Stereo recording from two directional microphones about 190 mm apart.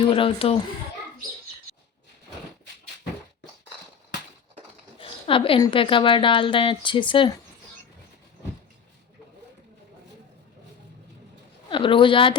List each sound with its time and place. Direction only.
0.0 s a woman's voice: 30° left (ahead or behind)
4.9 s a woman's voice: 30° left (ahead or behind)
11.7 s a woman's voice: 25° left (ahead or behind)